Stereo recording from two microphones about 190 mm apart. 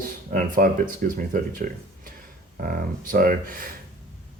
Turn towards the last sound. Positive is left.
turn(degrees=-50)  # may be behind; listen again after turning